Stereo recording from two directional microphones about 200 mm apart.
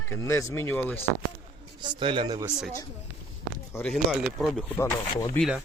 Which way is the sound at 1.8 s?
25° right (ahead or behind).